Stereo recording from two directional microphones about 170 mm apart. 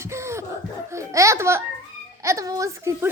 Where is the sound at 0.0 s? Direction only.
15° right (ahead or behind).